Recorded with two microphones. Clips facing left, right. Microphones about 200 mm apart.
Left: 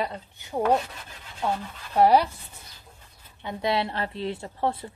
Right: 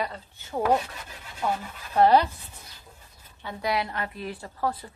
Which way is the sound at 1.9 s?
10° left (ahead or behind).